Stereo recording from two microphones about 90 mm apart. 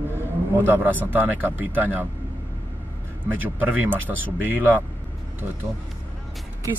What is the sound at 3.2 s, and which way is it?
Speech, 20° right (ahead or behind).